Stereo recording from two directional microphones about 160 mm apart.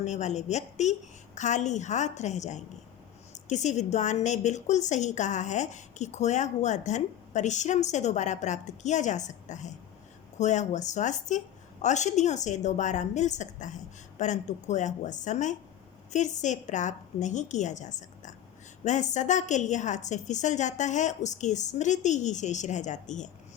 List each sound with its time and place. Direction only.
0.0 s a woman's voice: 45° left (ahead or behind)